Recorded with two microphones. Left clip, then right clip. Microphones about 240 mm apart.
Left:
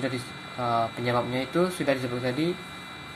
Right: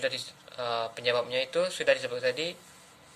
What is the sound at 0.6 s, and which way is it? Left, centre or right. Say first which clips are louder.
Speech: left 5 dB; right.